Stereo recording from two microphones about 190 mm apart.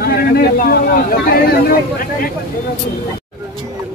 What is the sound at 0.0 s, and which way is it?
Speech, 50° left (ahead or behind).